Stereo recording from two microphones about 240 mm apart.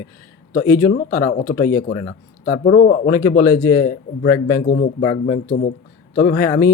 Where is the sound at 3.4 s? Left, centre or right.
Centre.